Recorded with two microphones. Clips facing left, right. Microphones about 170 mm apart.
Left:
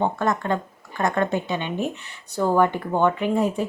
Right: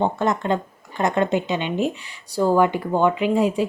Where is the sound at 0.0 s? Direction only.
20° right (ahead or behind).